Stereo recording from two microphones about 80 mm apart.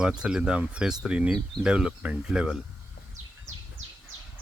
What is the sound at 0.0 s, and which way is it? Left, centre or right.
Speech, centre.